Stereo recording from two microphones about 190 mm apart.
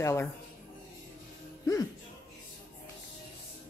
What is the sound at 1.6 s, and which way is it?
Music, 15° left (ahead or behind).